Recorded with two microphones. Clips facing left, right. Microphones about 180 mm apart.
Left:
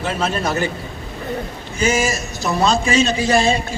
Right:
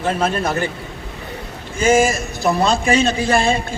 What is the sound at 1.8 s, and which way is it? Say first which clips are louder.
A man's voice: right 4 dB; 50° right (ahead or behind).